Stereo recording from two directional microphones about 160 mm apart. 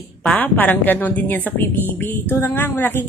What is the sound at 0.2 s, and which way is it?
A woman's voice, 10° left (ahead or behind).